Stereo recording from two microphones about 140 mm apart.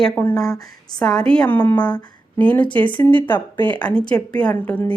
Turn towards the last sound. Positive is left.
turn(degrees=10)  # may be behind; listen again after turning